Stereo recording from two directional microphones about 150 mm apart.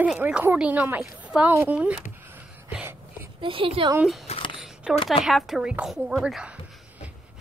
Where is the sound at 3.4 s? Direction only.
35° right (ahead or behind).